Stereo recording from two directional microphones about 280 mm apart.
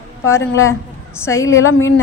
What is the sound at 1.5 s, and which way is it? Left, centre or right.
Speech, left.